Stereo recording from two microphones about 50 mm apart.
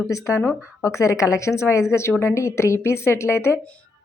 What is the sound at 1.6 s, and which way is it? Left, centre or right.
A woman's voice, left.